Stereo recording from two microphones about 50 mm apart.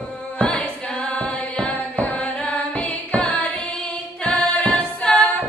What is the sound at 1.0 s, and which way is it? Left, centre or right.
Music, left.